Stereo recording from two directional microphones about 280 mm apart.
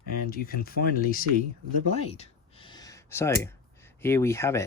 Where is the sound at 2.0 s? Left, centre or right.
Left.